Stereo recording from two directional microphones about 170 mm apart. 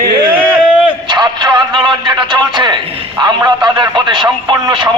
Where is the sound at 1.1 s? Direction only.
25° right (ahead or behind).